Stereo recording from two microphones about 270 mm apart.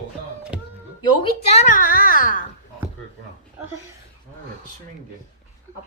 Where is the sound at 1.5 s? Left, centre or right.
Left.